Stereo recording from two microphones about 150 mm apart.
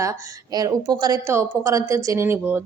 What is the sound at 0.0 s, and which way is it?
A woman's voice, 20° right (ahead or behind).